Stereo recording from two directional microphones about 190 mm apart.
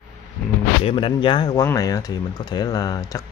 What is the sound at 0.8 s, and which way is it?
Speech, 25° left (ahead or behind).